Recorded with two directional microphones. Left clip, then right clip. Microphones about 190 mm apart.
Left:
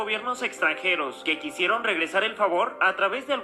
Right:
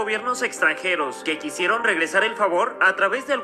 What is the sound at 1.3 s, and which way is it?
Speech, 55° right (ahead or behind).